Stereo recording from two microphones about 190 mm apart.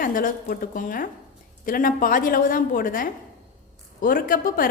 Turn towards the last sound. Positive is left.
turn(degrees=50)  # may be behind; listen again after turning